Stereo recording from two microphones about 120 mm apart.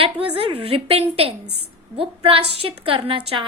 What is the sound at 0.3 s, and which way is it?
A woman's voice, 55° right (ahead or behind).